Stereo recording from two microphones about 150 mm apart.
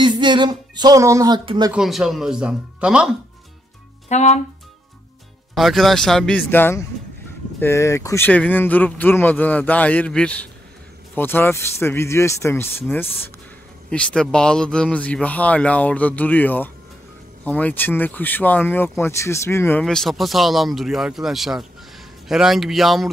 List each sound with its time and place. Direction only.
0.0 s music: 30° right (ahead or behind)
1.4 s speech: 35° right (ahead or behind)
1.7 s speech: centre (ahead or behind)
4.1 s speech: 50° left (ahead or behind)
5.5 s speech: centre (ahead or behind); by 19.8 s 15° left (ahead or behind)
19.8 s speech: 5° left (ahead or behind)